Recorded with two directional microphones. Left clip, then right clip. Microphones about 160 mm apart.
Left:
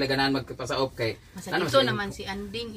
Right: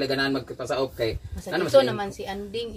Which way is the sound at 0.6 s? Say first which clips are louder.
Right 2 dB; 20° right (ahead or behind).